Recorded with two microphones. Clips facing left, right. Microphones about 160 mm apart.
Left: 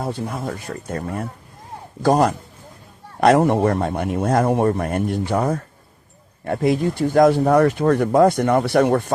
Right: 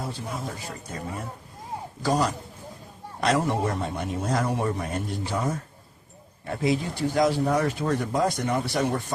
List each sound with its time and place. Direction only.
0.0 s speech: 55° left (ahead or behind)